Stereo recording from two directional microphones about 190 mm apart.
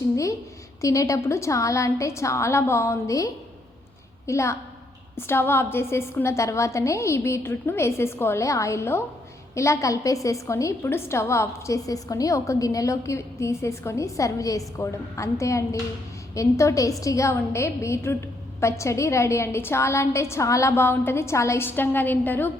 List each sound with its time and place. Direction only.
0.8 s a woman's voice: 15° left (ahead or behind)